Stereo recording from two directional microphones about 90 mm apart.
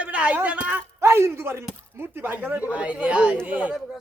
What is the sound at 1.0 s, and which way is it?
Speech, 30° right (ahead or behind).